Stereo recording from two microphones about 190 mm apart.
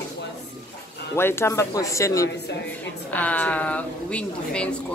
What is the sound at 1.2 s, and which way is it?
Speech, 15° left (ahead or behind).